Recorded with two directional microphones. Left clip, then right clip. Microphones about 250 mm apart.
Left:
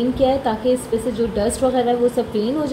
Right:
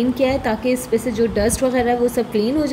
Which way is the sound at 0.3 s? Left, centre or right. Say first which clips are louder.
Left 1 dB; right.